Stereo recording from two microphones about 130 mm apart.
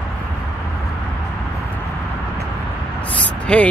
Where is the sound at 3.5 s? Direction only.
10° left (ahead or behind).